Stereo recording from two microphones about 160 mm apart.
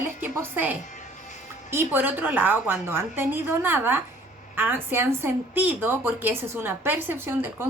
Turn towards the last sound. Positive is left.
turn(degrees=-15)  # may be behind; listen again after turning